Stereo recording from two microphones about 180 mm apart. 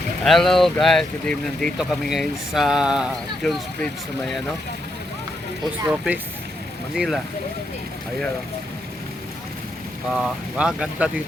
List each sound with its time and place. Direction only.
0.3 s speech: centre (ahead or behind)
5.8 s speech: 10° right (ahead or behind)
10.1 s speech: 5° right (ahead or behind)